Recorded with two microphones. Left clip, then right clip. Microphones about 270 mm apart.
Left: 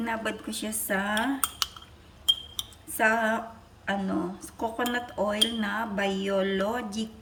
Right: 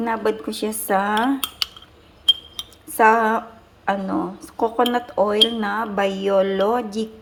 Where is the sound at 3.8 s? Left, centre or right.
Centre.